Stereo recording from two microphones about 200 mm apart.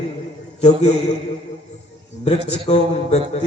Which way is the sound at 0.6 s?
35° left (ahead or behind).